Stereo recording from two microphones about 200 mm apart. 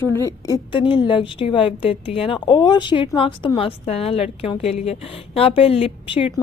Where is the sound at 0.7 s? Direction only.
25° left (ahead or behind).